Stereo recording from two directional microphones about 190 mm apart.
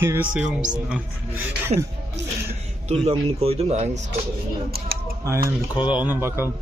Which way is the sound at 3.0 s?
30° right (ahead or behind).